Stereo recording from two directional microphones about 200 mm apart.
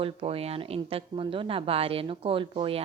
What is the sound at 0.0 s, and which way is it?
A woman's voice, 30° right (ahead or behind).